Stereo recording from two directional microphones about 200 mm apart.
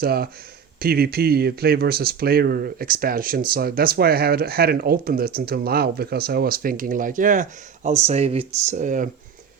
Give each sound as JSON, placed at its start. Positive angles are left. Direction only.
{"t": 0.0, "sound": "speech", "side_deg": -50}